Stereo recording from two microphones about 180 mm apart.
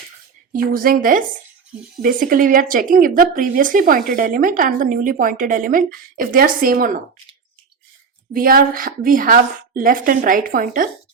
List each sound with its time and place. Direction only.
0.5 s speech: 50° right (ahead or behind)
8.3 s speech: 55° right (ahead or behind)